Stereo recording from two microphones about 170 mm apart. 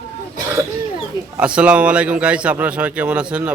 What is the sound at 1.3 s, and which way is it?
A man's voice, 5° right (ahead or behind).